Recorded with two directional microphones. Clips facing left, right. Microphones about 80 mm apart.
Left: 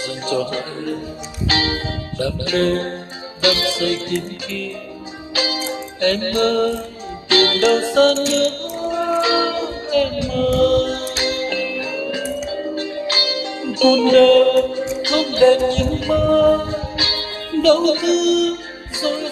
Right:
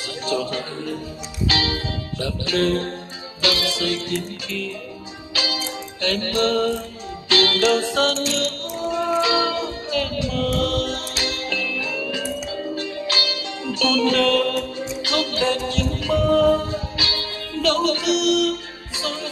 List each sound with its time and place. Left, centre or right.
0.3 s a man's voice: left
1.5 s music: left